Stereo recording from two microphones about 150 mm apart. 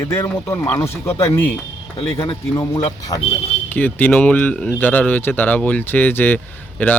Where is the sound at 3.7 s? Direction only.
10° left (ahead or behind).